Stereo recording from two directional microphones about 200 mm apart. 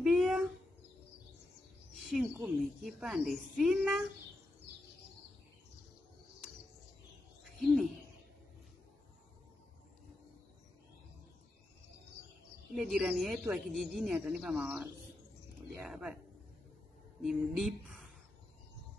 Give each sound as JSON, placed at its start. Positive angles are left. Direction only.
{"t": 0.0, "sound": "a sound", "side_deg": 0}
{"t": 2.3, "sound": "speech", "side_deg": -5}
{"t": 7.5, "sound": "owl", "side_deg": 0}
{"t": 12.7, "sound": "speech", "side_deg": 0}
{"t": 15.9, "sound": "speech", "side_deg": -5}
{"t": 17.2, "sound": "a sound", "side_deg": 0}